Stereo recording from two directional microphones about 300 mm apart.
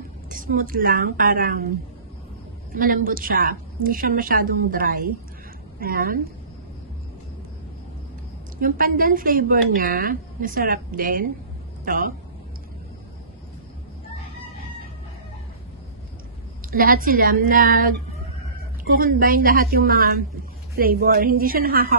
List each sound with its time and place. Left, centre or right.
0.3 s a woman's voice: right
2.7 s a woman's voice: right
8.5 s a woman's voice: right
16.7 s a woman's voice: right